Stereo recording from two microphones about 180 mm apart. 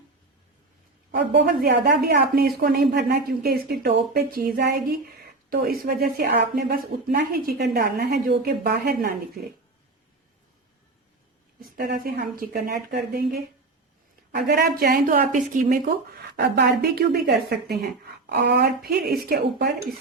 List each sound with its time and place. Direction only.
1.3 s a woman's voice: 65° right (ahead or behind)
11.6 s a woman's voice: 55° right (ahead or behind)